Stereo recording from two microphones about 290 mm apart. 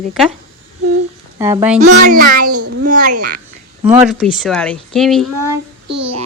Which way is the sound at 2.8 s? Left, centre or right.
Right.